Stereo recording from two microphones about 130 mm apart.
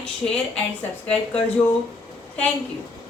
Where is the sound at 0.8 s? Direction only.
10° left (ahead or behind).